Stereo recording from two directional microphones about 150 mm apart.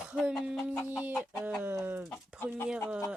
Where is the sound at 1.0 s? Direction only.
10° right (ahead or behind).